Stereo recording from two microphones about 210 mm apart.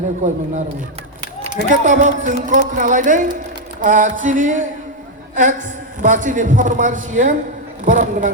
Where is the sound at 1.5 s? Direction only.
35° right (ahead or behind).